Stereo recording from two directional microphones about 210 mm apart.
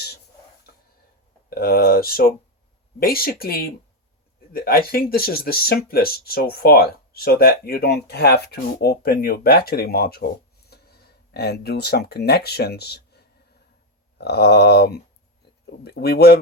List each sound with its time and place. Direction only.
1.5 s speech: 45° left (ahead or behind)